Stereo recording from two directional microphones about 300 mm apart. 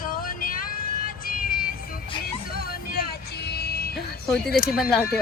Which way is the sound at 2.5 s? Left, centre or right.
Left.